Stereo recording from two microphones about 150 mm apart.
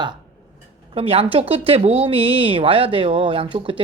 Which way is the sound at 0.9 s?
40° right (ahead or behind).